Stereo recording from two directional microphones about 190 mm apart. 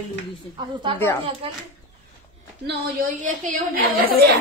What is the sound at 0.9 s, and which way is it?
Speech, 10° left (ahead or behind).